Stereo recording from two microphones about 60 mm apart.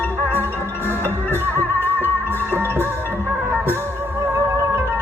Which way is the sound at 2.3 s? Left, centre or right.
Right.